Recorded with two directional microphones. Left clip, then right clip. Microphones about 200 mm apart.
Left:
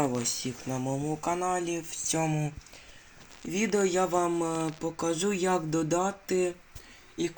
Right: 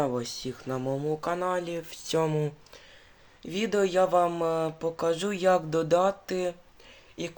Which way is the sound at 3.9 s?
20° right (ahead or behind).